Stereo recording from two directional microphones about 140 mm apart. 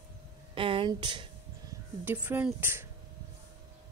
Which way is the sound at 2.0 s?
15° right (ahead or behind).